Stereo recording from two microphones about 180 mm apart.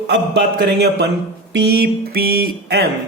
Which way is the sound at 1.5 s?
65° right (ahead or behind).